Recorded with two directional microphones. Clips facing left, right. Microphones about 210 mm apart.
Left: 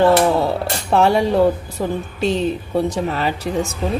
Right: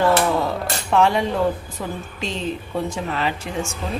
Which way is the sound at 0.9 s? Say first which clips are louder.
Left 3 dB; 35° left (ahead or behind).